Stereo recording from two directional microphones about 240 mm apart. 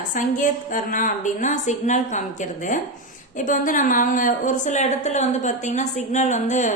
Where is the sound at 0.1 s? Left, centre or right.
Left.